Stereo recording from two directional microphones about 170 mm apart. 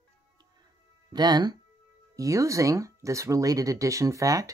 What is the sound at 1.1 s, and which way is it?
Speech, 25° right (ahead or behind).